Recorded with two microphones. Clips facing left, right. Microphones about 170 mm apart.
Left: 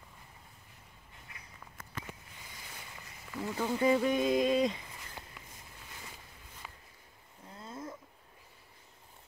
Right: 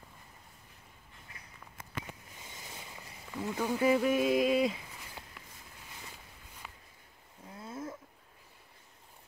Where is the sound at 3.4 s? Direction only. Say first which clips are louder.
Even; 5° right (ahead or behind).